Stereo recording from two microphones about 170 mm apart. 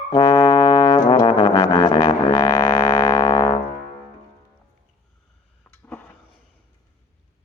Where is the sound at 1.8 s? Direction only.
20° left (ahead or behind).